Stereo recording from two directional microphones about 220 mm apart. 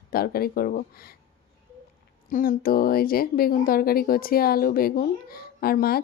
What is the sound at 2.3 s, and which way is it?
A woman's voice, 40° left (ahead or behind).